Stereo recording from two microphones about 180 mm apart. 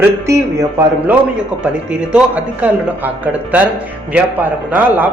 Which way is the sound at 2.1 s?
10° right (ahead or behind).